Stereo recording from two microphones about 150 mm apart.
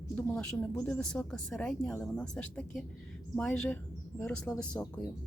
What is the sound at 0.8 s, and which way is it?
Speech, 10° left (ahead or behind).